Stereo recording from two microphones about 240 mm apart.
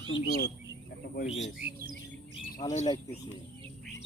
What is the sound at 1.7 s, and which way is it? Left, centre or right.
Squawk, right.